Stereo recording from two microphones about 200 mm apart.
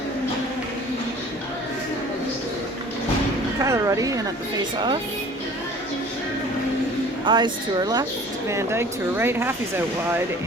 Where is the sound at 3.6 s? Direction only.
15° right (ahead or behind).